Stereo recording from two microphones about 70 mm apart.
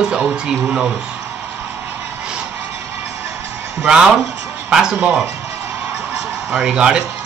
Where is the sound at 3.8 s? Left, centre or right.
Centre.